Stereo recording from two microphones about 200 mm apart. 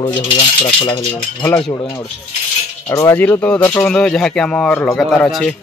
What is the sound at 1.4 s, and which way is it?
Speech, 10° left (ahead or behind).